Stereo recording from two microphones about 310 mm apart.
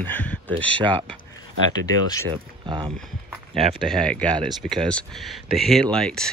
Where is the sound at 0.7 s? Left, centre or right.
Centre.